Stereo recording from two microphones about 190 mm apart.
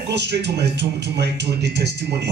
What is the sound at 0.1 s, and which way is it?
Speech, 65° right (ahead or behind).